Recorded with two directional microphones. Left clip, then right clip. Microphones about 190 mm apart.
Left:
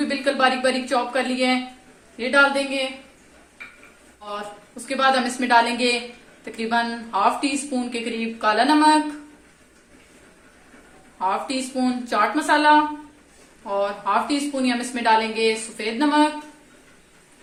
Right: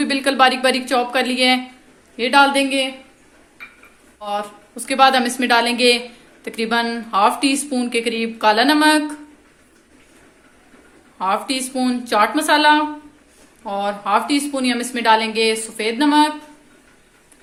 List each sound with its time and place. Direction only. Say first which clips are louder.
0.0 s speech: right 5 dB; 50° right (ahead or behind)
4.9 s speech: right 6 dB; 50° right (ahead or behind)
11.2 s speech: right 3 dB; 50° right (ahead or behind)